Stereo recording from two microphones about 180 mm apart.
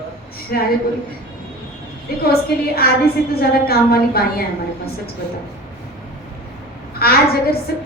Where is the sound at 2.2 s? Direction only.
60° left (ahead or behind).